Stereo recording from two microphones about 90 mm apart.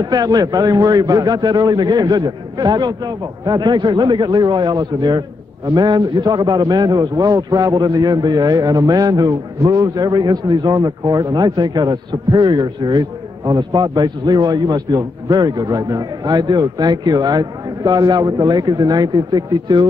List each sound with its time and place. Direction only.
0.0 s a man's voice: 45° right (ahead or behind)